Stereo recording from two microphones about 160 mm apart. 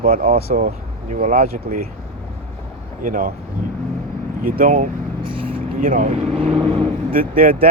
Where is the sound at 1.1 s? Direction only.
60° right (ahead or behind).